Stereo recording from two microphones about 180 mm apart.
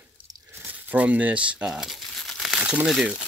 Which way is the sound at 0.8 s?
5° right (ahead or behind).